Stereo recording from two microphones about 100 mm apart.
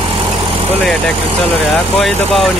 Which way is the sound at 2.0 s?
Centre (ahead or behind).